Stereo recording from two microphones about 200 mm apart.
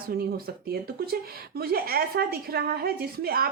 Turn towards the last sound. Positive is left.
turn(degrees=-50)  # may be behind; listen again after turning